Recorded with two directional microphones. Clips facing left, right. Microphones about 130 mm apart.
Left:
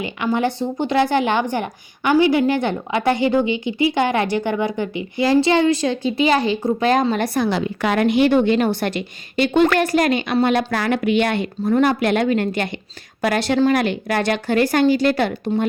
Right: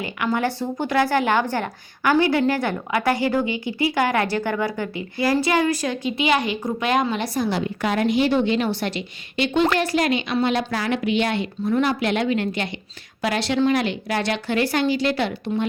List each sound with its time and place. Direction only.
0.0 s a woman's voice: 20° left (ahead or behind)
7.2 s a woman's voice: 75° left (ahead or behind); by 15.6 s 45° left (ahead or behind)